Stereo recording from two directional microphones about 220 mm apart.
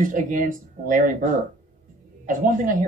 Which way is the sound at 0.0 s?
35° right (ahead or behind).